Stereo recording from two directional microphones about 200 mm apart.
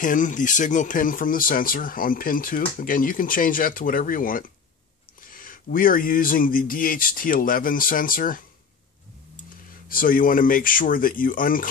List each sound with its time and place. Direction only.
0.0 s speech: 40° left (ahead or behind)
9.8 s speech: 45° left (ahead or behind)